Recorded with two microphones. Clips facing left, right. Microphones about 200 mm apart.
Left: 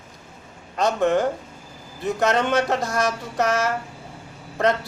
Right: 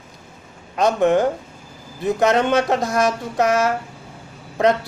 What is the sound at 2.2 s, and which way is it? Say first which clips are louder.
Mantra: right 3 dB; 15° right (ahead or behind).